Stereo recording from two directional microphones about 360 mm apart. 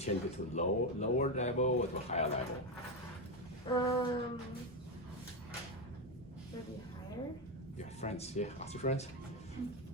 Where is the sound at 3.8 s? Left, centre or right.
Centre.